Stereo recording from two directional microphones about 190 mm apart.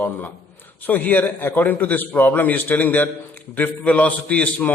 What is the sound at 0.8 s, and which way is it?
A man's voice, 10° left (ahead or behind).